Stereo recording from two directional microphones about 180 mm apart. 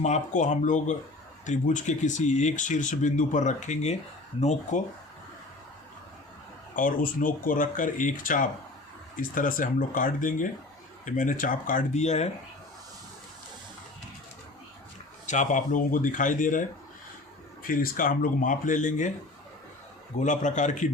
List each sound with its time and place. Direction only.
0.0 s speech: 40° left (ahead or behind)
6.7 s speech: 50° left (ahead or behind)
15.3 s speech: 45° left (ahead or behind)
20.1 s speech: 45° left (ahead or behind)